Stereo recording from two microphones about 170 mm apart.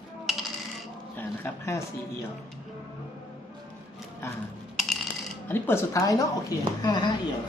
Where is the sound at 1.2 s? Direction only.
15° left (ahead or behind).